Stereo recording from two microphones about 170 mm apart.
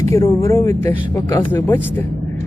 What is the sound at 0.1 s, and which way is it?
Speech, 20° left (ahead or behind).